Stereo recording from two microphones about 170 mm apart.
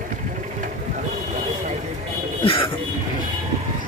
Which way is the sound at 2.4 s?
30° left (ahead or behind).